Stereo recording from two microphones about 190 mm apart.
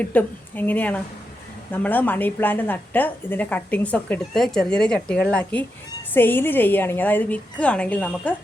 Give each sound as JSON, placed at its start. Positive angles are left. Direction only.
{"t": 0.0, "sound": "a woman's voice", "side_deg": 10}